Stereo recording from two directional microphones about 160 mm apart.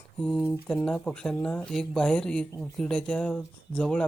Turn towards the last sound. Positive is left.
turn(degrees=10)  # may be behind; listen again after turning